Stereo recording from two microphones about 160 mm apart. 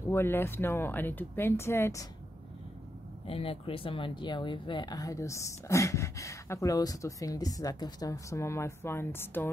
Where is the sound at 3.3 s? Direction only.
35° left (ahead or behind).